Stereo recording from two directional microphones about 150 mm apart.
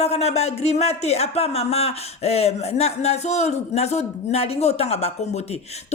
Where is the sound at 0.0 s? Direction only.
45° left (ahead or behind).